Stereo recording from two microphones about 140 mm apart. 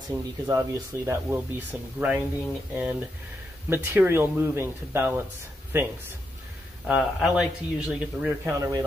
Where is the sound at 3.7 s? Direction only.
15° right (ahead or behind).